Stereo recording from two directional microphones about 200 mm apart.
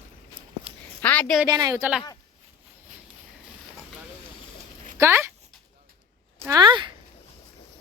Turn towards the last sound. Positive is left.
turn(degrees=-25)  # may be behind; listen again after turning